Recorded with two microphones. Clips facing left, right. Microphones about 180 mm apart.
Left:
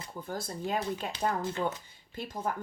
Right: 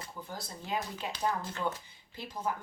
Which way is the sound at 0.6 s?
50° left (ahead or behind).